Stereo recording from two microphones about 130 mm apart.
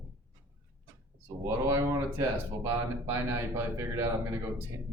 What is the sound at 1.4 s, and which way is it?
Speech, 25° right (ahead or behind).